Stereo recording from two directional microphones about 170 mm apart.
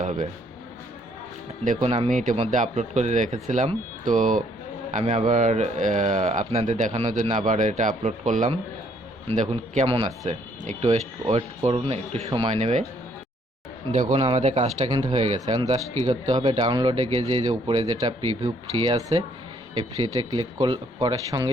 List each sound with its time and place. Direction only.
0.0 s speech: 45° right (ahead or behind)
1.6 s speech: 50° right (ahead or behind)
2.3 s speech: 35° right (ahead or behind)
13.9 s speech: 45° right (ahead or behind)
14.8 s speech: 25° right (ahead or behind)